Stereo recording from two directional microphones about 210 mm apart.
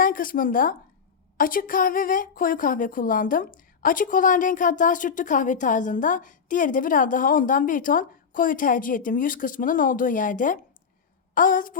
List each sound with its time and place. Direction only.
0.0 s a woman's voice: 40° left (ahead or behind)